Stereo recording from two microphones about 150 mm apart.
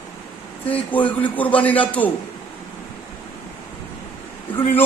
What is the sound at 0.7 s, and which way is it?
A man's voice, 10° left (ahead or behind).